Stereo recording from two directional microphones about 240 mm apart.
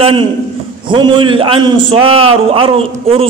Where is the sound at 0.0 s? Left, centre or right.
Right.